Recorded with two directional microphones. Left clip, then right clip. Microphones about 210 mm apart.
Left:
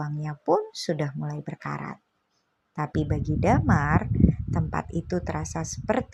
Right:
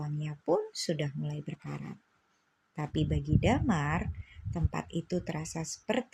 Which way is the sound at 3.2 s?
15° left (ahead or behind).